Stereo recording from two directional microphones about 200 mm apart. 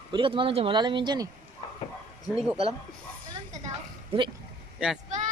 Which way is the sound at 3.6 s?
30° right (ahead or behind).